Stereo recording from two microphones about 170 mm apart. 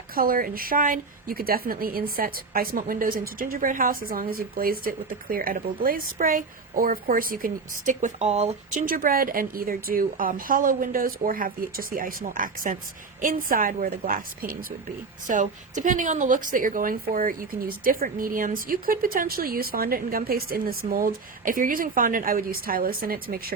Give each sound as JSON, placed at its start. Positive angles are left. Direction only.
{"t": 0.1, "sound": "a woman's voice", "side_deg": -60}
{"t": 8.9, "sound": "a woman's voice", "side_deg": -55}